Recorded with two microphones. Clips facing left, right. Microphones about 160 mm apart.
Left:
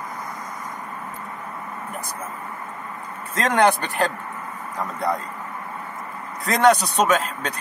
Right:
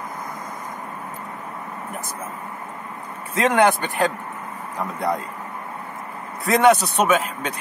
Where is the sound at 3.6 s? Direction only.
Centre (ahead or behind).